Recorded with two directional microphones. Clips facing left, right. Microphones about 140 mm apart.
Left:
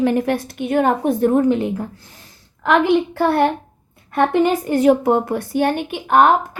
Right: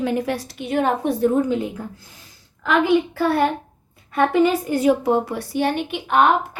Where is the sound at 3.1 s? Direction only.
60° left (ahead or behind).